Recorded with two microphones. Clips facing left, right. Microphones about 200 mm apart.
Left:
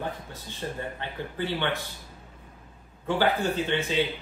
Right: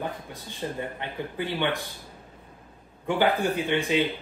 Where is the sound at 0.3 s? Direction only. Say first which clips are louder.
Right 2 dB; 15° right (ahead or behind).